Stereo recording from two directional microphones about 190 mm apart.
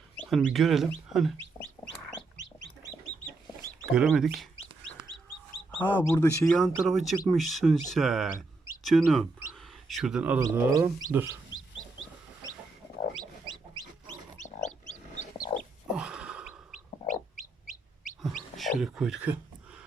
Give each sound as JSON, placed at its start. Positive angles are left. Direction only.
{"t": 0.3, "sound": "speech", "side_deg": 0}
{"t": 3.9, "sound": "speech", "side_deg": 0}
{"t": 5.7, "sound": "speech", "side_deg": 10}
{"t": 6.4, "sound": "speech", "side_deg": 0}
{"t": 10.4, "sound": "bird", "side_deg": -15}
{"t": 14.4, "sound": "chicken", "side_deg": 40}
{"t": 15.9, "sound": "a sound", "side_deg": -5}
{"t": 18.5, "sound": "a sound", "side_deg": 0}